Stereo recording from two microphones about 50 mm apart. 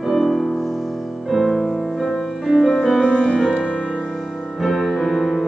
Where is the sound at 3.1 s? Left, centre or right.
Left.